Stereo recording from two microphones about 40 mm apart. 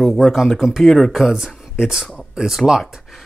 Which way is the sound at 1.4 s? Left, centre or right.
Centre.